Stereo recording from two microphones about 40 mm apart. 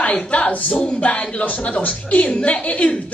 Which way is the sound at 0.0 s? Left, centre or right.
Left.